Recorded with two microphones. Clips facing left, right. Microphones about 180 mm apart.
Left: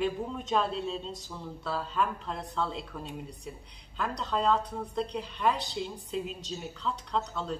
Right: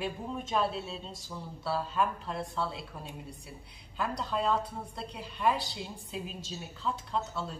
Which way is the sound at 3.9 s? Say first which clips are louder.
Left 1 dB; 5° right (ahead or behind).